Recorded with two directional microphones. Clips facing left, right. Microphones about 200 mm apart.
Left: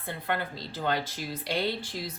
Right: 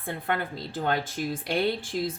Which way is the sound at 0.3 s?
50° right (ahead or behind).